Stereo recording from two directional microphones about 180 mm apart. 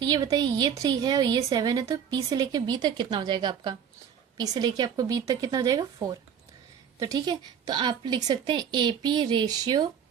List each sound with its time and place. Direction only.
0.0 s a woman's voice: 20° right (ahead or behind)